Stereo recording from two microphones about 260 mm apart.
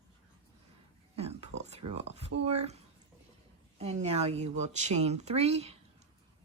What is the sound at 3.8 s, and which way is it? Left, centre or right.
Speech, right.